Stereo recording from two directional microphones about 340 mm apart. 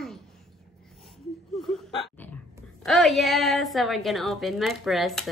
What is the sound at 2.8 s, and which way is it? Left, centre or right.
A woman's voice, centre.